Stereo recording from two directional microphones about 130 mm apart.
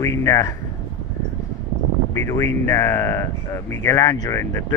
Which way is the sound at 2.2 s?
20° left (ahead or behind).